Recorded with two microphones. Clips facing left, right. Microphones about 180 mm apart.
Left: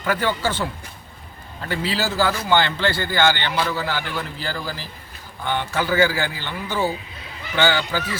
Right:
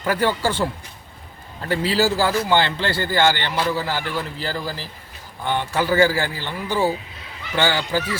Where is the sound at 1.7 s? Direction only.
35° right (ahead or behind).